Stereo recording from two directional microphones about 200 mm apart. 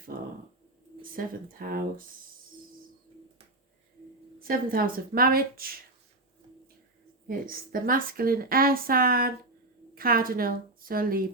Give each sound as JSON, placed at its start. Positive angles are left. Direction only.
{"t": 1.1, "sound": "a woman's voice", "side_deg": -45}
{"t": 4.4, "sound": "a woman's voice", "side_deg": -45}
{"t": 7.3, "sound": "a woman's voice", "side_deg": -45}